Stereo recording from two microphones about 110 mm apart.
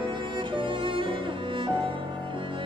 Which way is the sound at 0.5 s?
50° right (ahead or behind).